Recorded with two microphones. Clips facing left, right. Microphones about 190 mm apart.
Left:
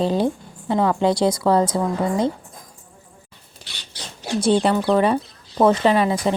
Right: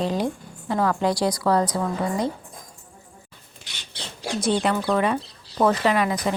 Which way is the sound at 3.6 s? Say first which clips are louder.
Left 1 dB; 20° right (ahead or behind).